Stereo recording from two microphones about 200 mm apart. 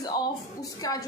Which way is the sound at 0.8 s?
20° left (ahead or behind).